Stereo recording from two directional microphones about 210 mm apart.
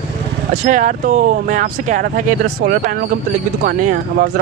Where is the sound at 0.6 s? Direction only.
40° right (ahead or behind).